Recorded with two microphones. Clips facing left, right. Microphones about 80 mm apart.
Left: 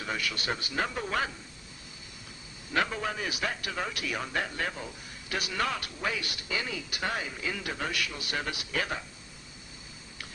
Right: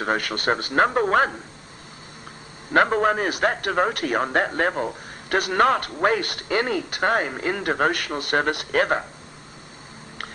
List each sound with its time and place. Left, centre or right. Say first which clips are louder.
0.0 s a man's voice: right 10 dB; right
2.7 s a man's voice: right 12 dB; right